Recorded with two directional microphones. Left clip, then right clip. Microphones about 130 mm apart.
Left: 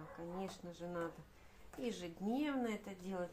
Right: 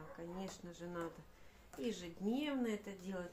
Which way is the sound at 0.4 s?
20° left (ahead or behind).